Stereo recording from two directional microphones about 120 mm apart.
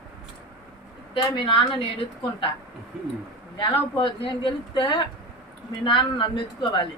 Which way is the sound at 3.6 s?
45° left (ahead or behind).